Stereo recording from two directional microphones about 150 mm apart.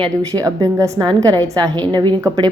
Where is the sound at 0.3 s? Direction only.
20° right (ahead or behind).